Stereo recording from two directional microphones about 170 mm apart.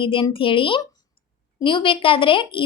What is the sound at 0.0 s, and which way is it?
A woman's voice, 30° left (ahead or behind).